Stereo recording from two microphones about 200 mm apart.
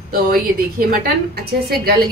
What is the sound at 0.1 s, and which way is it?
A woman's voice, 45° right (ahead or behind).